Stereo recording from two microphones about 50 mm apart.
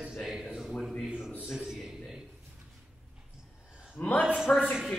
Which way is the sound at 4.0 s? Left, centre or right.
Left.